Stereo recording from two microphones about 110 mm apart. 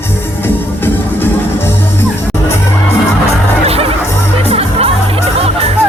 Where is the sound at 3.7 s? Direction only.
60° right (ahead or behind).